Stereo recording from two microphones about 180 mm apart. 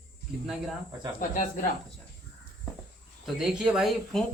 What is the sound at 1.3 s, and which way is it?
Speech, 50° left (ahead or behind).